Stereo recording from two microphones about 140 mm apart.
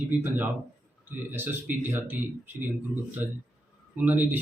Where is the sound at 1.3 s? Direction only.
15° right (ahead or behind).